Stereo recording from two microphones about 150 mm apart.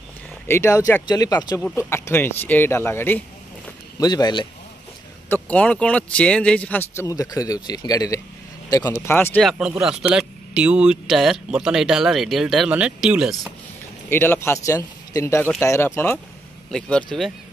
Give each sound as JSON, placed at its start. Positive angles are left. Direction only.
{"t": 0.5, "sound": "speech", "side_deg": 15}
{"t": 4.0, "sound": "speech", "side_deg": 30}
{"t": 5.3, "sound": "speech", "side_deg": 10}
{"t": 9.4, "sound": "speech", "side_deg": 0}
{"t": 14.0, "sound": "speech", "side_deg": 15}
{"t": 16.7, "sound": "speech", "side_deg": 5}